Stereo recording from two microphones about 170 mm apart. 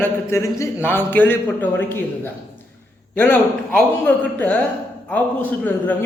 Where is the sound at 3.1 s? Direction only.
10° left (ahead or behind).